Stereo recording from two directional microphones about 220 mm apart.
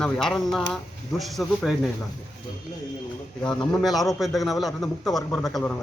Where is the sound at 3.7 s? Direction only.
Centre (ahead or behind).